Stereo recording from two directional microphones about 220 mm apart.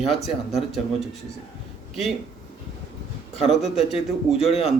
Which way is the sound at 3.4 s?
Centre (ahead or behind).